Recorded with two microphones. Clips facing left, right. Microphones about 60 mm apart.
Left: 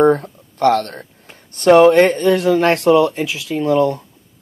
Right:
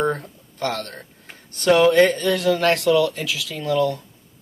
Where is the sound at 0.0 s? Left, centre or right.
Left.